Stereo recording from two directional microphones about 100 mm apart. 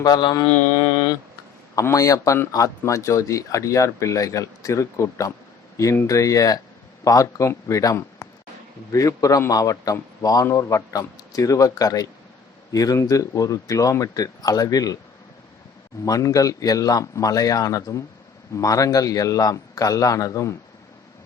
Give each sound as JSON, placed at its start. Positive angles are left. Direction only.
{"t": 0.0, "sound": "a man's voice", "side_deg": 45}
{"t": 1.7, "sound": "a man's voice", "side_deg": 35}
{"t": 16.0, "sound": "a man's voice", "side_deg": 35}